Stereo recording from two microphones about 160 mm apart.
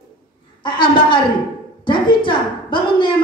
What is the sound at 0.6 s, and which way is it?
A woman's voice, 30° left (ahead or behind).